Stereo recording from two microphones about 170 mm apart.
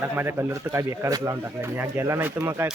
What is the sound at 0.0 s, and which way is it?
Speech, 15° right (ahead or behind).